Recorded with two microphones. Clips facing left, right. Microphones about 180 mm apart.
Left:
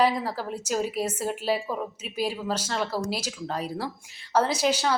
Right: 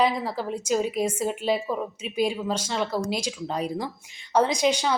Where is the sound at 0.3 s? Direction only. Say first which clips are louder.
Right 3 dB; 10° left (ahead or behind).